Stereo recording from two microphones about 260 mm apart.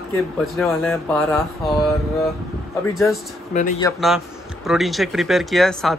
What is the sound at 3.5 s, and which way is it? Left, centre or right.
Speech, left.